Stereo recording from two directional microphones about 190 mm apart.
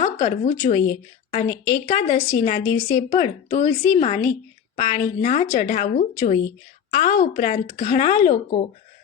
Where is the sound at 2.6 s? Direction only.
10° left (ahead or behind).